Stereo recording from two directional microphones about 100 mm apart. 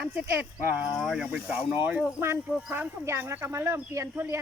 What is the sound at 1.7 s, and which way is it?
Speech, 15° right (ahead or behind).